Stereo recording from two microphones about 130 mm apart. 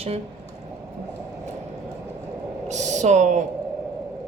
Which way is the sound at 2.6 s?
65° right (ahead or behind).